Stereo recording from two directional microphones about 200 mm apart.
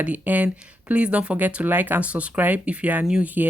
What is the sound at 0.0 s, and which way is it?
Speech, 10° right (ahead or behind).